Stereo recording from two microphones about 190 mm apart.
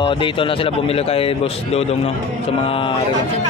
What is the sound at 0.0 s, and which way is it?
A man's voice, 25° left (ahead or behind).